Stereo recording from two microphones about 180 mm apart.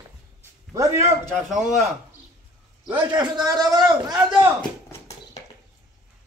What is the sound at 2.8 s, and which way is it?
Speech, 25° right (ahead or behind).